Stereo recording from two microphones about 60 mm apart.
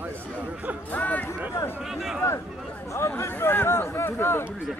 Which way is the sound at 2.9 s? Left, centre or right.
Left.